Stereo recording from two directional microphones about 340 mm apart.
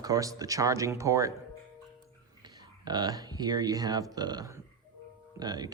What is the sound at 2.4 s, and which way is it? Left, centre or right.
Speech, centre.